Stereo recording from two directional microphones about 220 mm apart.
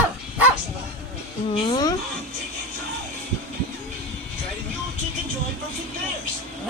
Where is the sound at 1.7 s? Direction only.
20° left (ahead or behind).